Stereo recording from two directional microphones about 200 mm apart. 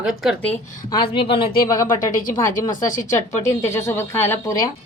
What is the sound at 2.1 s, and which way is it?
Speech, 45° left (ahead or behind).